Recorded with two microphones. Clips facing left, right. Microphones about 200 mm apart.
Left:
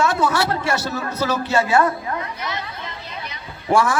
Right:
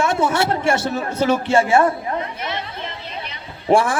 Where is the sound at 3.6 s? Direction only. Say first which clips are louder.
Right 2 dB; 30° right (ahead or behind).